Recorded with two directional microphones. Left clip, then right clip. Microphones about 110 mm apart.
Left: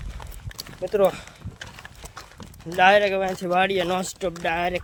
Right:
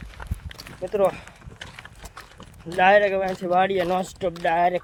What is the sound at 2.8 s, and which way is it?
Speech, 15° left (ahead or behind).